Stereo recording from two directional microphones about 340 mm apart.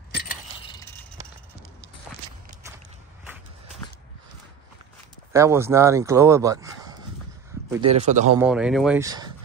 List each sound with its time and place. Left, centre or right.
0.1 s coin: left
5.3 s speech: centre
8.4 s speech: centre